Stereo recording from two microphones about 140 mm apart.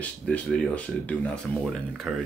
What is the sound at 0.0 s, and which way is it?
Speech, 10° left (ahead or behind).